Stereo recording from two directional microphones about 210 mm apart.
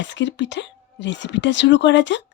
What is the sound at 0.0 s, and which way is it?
Speech, 60° left (ahead or behind).